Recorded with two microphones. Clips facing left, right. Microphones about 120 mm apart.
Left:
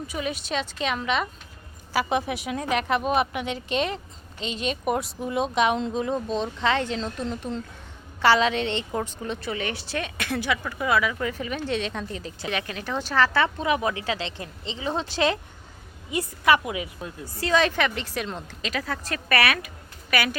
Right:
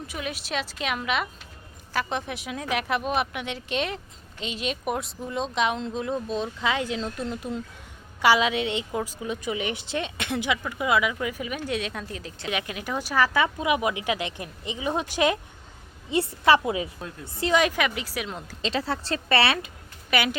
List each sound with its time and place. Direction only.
0.1 s speech: centre (ahead or behind)
1.9 s a woman's voice: 5° left (ahead or behind)
12.5 s a woman's voice: 15° right (ahead or behind)
16.0 s a woman's voice: 25° right (ahead or behind); by 18.4 s 5° right (ahead or behind)
18.6 s a woman's voice: 30° right (ahead or behind)